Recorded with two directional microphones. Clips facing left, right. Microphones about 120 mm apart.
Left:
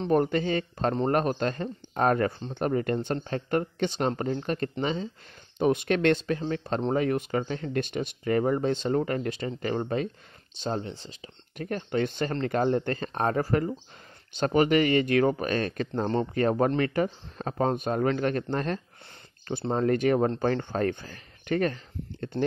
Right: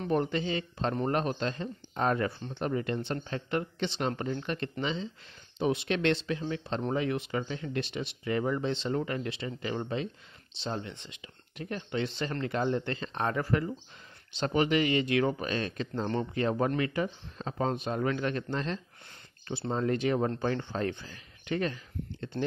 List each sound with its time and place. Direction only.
0.1 s speech: 45° left (ahead or behind)
10.8 s speech: 35° left (ahead or behind)
11.6 s speech: 50° left (ahead or behind)